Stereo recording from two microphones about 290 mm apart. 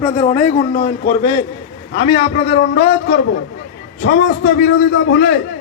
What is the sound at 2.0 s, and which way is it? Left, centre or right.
A man's voice, centre.